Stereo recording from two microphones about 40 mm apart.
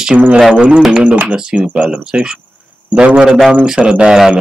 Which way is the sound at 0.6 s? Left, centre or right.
Right.